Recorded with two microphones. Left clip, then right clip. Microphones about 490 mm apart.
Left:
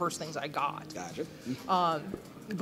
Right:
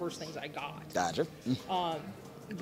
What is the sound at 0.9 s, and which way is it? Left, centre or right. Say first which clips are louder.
Speech: right 7 dB; right.